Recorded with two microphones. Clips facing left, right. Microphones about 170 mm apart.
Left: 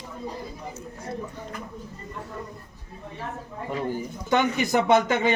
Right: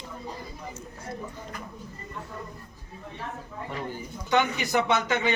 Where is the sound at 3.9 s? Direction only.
45° left (ahead or behind).